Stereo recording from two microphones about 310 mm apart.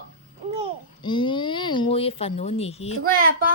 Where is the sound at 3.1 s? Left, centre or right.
Right.